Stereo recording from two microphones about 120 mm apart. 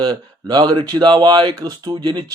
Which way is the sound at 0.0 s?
35° right (ahead or behind).